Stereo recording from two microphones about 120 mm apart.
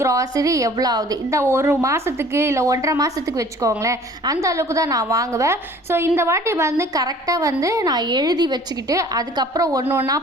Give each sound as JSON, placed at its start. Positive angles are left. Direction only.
{"t": 0.0, "sound": "a woman's voice", "side_deg": -25}